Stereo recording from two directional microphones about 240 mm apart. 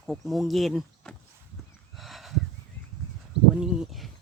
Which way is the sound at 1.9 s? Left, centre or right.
Centre.